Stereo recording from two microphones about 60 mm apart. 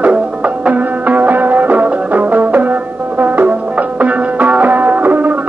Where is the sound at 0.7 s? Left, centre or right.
Right.